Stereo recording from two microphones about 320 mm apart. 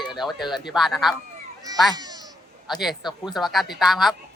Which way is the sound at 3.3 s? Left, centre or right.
Centre.